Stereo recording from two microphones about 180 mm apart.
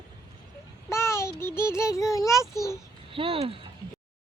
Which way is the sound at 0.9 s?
15° left (ahead or behind).